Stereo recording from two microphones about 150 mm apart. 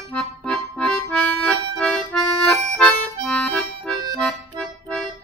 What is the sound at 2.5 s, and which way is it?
Music, 10° left (ahead or behind).